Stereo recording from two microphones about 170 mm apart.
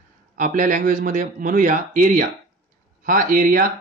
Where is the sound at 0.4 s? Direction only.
50° right (ahead or behind).